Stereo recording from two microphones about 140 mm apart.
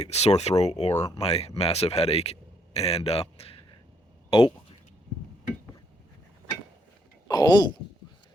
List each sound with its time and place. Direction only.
0.0 s a man's voice: 50° left (ahead or behind)
7.3 s speech: 30° left (ahead or behind)